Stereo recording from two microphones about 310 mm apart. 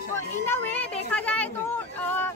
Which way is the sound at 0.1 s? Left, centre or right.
Centre.